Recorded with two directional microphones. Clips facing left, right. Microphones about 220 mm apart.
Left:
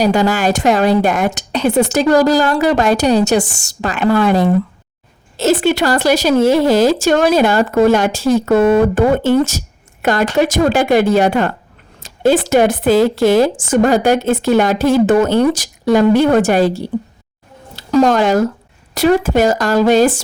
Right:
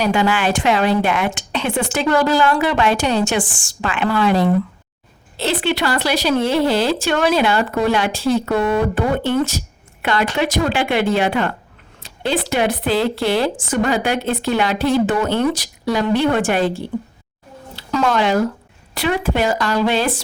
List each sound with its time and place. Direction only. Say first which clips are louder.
0.0 s speech: left 4 dB; 40° left (ahead or behind)